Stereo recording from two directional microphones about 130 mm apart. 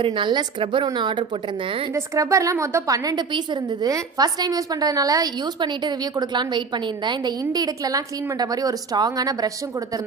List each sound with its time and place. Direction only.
0.0 s a woman's voice: 40° right (ahead or behind)
1.9 s a woman's voice: 20° right (ahead or behind)